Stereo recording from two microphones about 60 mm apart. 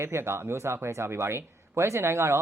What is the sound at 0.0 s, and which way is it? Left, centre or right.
Speech, right.